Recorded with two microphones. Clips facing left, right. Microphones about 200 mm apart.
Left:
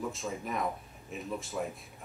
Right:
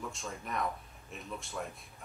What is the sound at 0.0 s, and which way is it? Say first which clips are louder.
Speech: left 6 dB; centre (ahead or behind).